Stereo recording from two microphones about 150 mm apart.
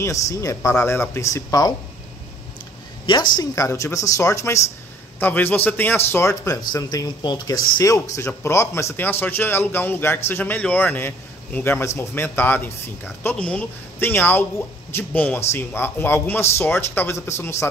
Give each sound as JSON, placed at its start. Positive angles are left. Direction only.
{"t": 0.0, "sound": "speech", "side_deg": 20}
{"t": 3.1, "sound": "a man's voice", "side_deg": 30}